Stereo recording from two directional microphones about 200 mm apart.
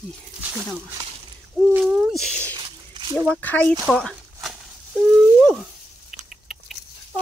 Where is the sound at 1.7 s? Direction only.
5° right (ahead or behind).